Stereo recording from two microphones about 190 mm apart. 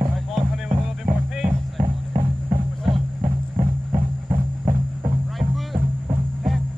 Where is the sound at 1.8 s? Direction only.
25° right (ahead or behind).